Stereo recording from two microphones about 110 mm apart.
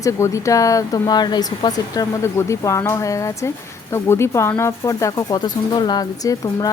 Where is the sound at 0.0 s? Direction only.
30° left (ahead or behind).